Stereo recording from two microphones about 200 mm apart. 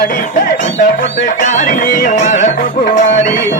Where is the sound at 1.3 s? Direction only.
40° left (ahead or behind).